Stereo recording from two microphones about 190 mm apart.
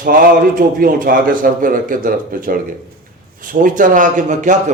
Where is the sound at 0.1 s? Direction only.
45° right (ahead or behind).